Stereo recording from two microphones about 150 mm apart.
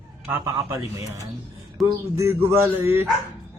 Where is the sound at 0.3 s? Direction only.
20° right (ahead or behind).